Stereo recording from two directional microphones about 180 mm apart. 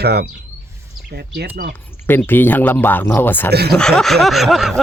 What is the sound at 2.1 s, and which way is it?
A man's voice, 10° left (ahead or behind).